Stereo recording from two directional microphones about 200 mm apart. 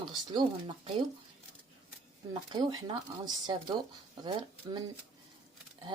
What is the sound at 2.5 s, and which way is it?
Speech, 20° right (ahead or behind).